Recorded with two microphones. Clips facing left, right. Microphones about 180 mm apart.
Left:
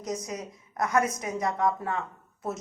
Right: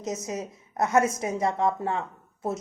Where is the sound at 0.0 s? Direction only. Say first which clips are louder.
Right 2 dB; 25° right (ahead or behind).